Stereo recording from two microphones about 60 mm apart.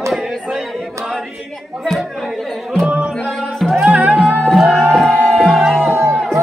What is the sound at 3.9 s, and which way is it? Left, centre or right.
Music, right.